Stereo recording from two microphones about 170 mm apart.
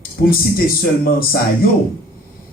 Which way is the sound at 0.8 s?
60° left (ahead or behind).